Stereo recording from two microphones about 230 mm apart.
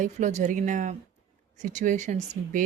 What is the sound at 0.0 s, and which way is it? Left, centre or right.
Speech, right.